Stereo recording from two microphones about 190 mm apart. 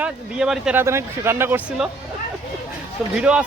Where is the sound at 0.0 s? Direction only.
5° right (ahead or behind).